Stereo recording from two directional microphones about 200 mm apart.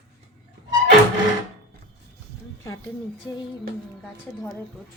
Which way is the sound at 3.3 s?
15° left (ahead or behind).